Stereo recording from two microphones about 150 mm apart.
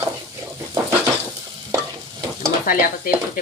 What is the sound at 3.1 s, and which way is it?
Speech, 75° left (ahead or behind).